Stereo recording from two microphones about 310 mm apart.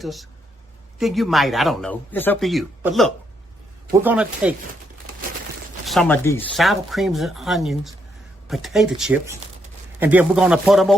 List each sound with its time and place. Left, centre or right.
0.0 s speech: centre
5.8 s speech: centre